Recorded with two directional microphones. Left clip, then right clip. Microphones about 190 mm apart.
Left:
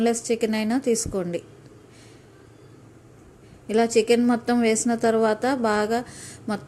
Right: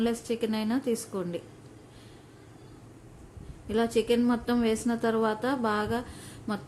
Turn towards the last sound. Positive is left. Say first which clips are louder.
# left 5 dB
turn(degrees=15)  # may be behind; listen again after turning